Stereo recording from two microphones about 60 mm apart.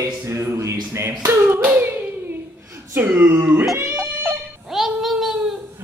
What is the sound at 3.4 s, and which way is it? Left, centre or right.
Singing, right.